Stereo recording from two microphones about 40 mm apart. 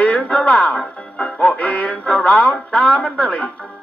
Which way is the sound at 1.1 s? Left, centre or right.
Left.